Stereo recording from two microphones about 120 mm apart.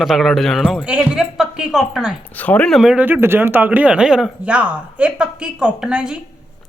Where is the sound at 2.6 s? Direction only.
5° right (ahead or behind).